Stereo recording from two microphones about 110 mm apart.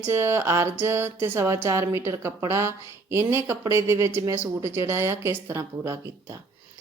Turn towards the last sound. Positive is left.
turn(degrees=-25)  # may be behind; listen again after turning